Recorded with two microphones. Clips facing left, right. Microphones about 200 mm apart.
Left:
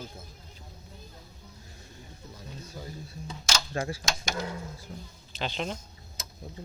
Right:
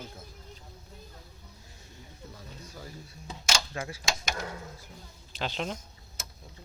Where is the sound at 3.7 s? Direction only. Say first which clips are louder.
Left 5 dB; 35° left (ahead or behind).